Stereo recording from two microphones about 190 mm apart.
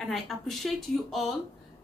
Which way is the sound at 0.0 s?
Centre (ahead or behind).